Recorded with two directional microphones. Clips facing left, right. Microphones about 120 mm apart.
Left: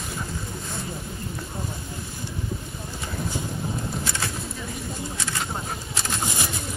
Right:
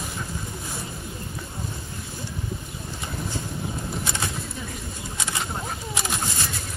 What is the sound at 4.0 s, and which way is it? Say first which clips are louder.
Bird: even; 20° right (ahead or behind).